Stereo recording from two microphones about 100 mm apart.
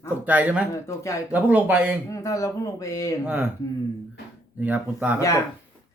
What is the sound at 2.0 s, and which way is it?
Speech, 35° left (ahead or behind).